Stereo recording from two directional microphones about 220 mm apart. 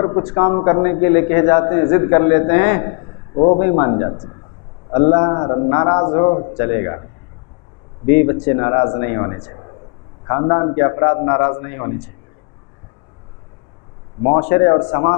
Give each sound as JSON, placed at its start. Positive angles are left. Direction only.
{"t": 0.0, "sound": "a man's voice", "side_deg": 20}
{"t": 8.0, "sound": "a man's voice", "side_deg": 15}
{"t": 14.2, "sound": "a man's voice", "side_deg": 25}